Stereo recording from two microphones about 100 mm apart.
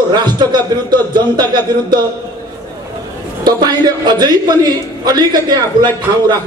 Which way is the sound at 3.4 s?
45° right (ahead or behind).